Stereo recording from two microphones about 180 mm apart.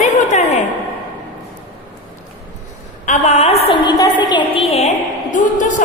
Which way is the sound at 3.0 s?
40° left (ahead or behind).